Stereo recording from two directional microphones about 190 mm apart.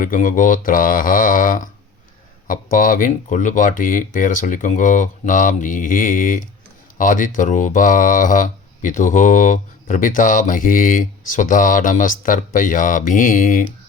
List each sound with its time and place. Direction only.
0.0 s speech: 45° left (ahead or behind)